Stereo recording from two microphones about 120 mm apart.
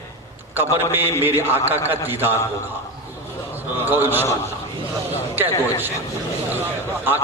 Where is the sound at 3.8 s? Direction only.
15° right (ahead or behind).